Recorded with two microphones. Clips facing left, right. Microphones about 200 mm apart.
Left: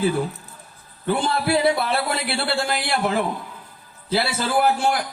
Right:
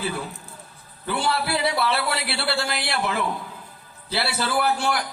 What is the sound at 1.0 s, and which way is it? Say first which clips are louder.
A man's voice: left 3 dB; 45° left (ahead or behind).